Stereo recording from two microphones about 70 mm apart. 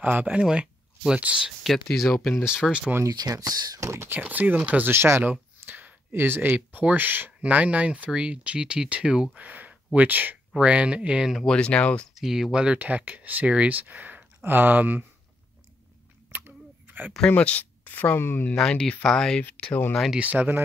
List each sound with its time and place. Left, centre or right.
0.0 s speech: right
1.6 s speech: centre
3.1 s speech: right
3.8 s speech: right
4.1 s speech: right
11.5 s speech: centre
12.2 s speech: centre; by 15.0 s right
16.3 s a sound: right
17.3 s speech: centre
18.6 s speech: centre
20.1 s speech: right